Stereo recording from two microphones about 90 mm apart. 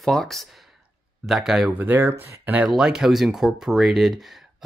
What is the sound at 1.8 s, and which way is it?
Speech, 20° right (ahead or behind).